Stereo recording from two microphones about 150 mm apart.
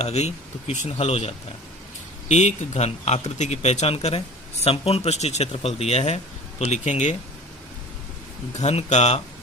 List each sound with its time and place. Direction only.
0.0 s speech: 45° left (ahead or behind)
2.3 s speech: 50° left (ahead or behind)
8.5 s speech: 50° left (ahead or behind)